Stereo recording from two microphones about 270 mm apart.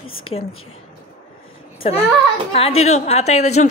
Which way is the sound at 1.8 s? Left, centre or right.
Left.